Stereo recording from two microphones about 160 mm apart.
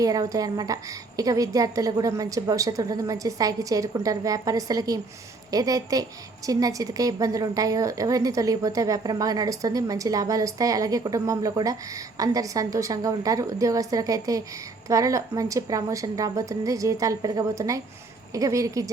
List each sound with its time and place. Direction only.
0.0 s a woman's voice: 20° right (ahead or behind)